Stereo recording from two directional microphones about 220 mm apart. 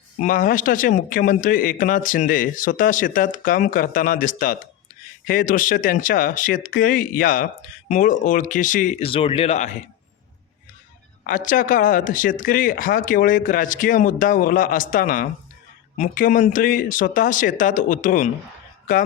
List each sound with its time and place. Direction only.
0.2 s a man's voice: 35° left (ahead or behind)
11.2 s a man's voice: 35° left (ahead or behind)